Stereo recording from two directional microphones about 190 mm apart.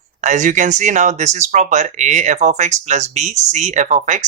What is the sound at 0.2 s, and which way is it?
Speech, 40° right (ahead or behind).